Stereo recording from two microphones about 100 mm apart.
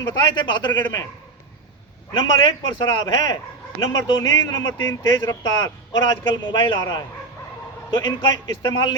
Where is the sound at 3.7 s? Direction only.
35° left (ahead or behind).